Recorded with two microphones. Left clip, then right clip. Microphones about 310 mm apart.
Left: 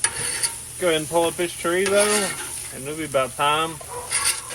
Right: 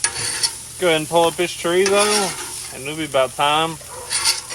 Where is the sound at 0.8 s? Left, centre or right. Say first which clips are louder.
Right 4 dB; right.